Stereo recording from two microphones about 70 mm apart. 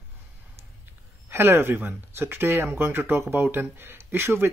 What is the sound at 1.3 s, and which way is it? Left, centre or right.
Speech, right.